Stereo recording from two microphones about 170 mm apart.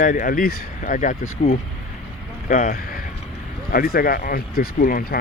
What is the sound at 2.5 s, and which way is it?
Speech, 55° left (ahead or behind).